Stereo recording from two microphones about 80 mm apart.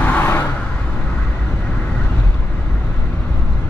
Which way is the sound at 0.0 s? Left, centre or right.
Centre.